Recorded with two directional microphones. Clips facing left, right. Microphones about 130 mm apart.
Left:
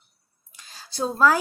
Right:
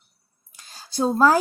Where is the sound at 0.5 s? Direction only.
40° right (ahead or behind).